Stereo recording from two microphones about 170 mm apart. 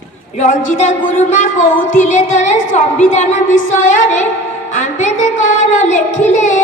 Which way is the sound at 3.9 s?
45° left (ahead or behind).